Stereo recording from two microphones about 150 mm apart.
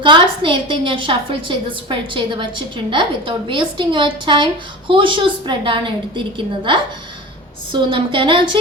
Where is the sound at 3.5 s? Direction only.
35° right (ahead or behind).